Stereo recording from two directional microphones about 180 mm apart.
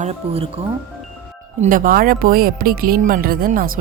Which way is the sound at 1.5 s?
50° right (ahead or behind).